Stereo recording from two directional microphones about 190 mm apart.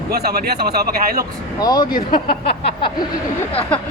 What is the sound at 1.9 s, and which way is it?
Speech, 50° left (ahead or behind).